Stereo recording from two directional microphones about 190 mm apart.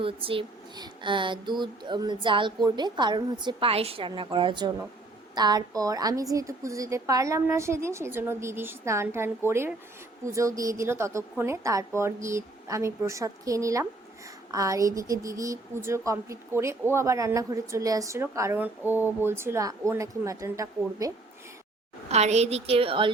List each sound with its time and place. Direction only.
0.0 s a sound: 30° right (ahead or behind)
6.3 s a woman's voice: 15° right (ahead or behind)
22.1 s a woman's voice: 35° right (ahead or behind)